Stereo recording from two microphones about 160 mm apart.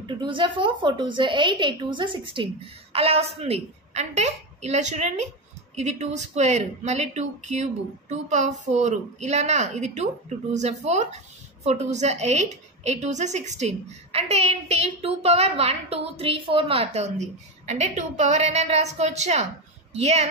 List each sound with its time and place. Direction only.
0.0 s a woman's voice: 30° right (ahead or behind)